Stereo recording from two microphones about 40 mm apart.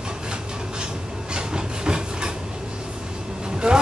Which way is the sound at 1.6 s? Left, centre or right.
Centre.